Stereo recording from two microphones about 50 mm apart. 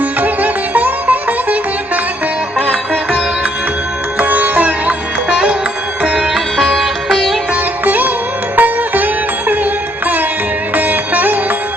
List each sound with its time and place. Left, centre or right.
0.0 s sitar: right
2.6 s music: left
4.2 s sitar: right
5.3 s music: centre
6.1 s sitar: centre
6.6 s music: centre
7.5 s music: right
10.8 s music: right